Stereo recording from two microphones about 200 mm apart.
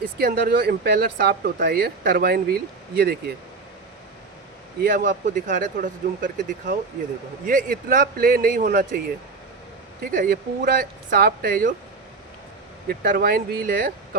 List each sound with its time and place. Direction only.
0.2 s speech: 50° right (ahead or behind)
4.8 s speech: 50° right (ahead or behind)
10.0 s speech: 45° right (ahead or behind)
12.9 s speech: 45° right (ahead or behind)